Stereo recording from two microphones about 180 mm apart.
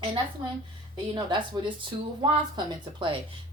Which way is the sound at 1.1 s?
25° right (ahead or behind).